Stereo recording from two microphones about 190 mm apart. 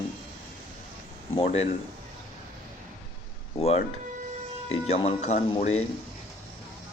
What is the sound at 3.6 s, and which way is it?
Speech, 35° left (ahead or behind).